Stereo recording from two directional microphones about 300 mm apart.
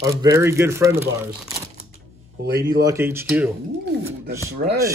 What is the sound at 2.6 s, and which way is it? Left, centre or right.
Speech, centre.